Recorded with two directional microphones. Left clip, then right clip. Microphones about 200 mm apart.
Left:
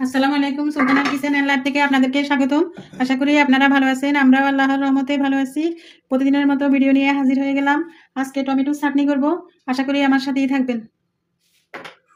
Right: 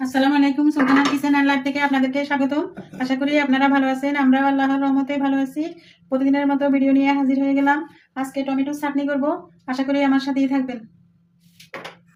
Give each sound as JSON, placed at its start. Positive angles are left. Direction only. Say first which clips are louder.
{"t": 0.0, "sound": "a woman's voice", "louder": "even", "side_deg": 55}
{"t": 8.3, "sound": "speech", "louder": "left 3 dB", "side_deg": 45}